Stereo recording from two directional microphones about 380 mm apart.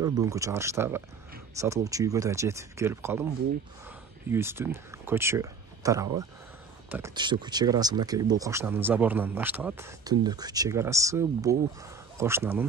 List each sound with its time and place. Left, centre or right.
0.0 s speech: centre
4.3 s speech: centre